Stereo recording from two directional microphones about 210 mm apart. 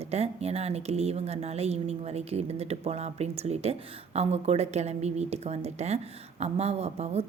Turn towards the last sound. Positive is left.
turn(degrees=-30)  # may be behind; listen again after turning